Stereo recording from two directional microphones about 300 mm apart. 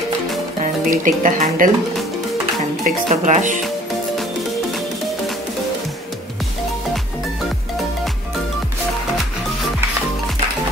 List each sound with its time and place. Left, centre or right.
0.6 s speech: right
2.8 s speech: right